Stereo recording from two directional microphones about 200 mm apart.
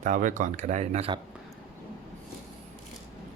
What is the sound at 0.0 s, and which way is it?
Speech, 40° right (ahead or behind).